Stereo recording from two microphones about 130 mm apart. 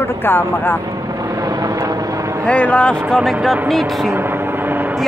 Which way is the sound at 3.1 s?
Centre (ahead or behind).